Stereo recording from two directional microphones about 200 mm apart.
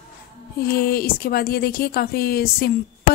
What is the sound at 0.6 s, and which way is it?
Speech, 50° left (ahead or behind).